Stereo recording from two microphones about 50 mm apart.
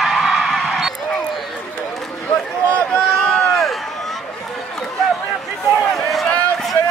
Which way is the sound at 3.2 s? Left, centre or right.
Centre.